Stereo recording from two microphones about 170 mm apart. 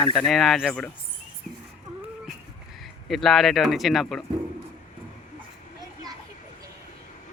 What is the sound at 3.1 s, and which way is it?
Speech, centre (ahead or behind).